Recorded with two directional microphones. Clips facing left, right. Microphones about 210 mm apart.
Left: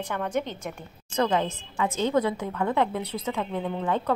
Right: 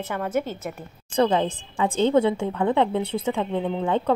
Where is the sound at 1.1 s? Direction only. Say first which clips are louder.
Right 4 dB; 30° right (ahead or behind).